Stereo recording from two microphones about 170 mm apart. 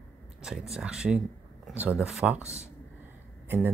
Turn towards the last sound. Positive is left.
turn(degrees=-10)  # may be behind; listen again after turning